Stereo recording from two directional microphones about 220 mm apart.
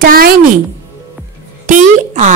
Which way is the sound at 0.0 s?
40° right (ahead or behind).